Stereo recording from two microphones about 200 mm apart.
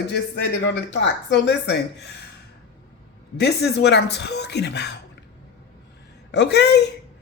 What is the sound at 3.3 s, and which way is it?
Speech, 55° left (ahead or behind).